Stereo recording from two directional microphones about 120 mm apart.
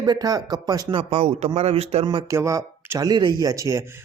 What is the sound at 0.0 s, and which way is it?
Speech, 30° right (ahead or behind).